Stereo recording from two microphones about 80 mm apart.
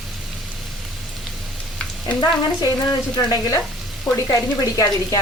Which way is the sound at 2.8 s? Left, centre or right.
Left.